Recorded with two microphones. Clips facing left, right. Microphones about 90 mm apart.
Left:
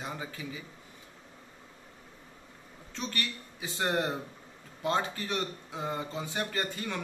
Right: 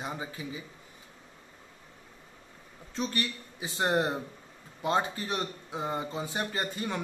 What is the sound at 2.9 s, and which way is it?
A man's voice, 25° right (ahead or behind).